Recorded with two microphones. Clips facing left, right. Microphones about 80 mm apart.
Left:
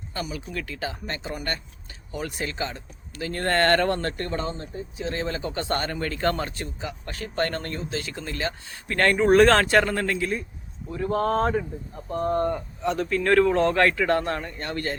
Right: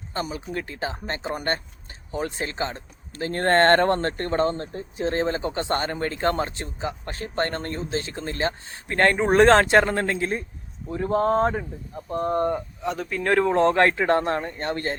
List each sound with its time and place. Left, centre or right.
0.1 s a man's voice: right
12.8 s speech: centre
13.1 s a man's voice: centre